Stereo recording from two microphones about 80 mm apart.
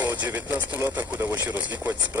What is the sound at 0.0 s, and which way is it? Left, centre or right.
Speech, right.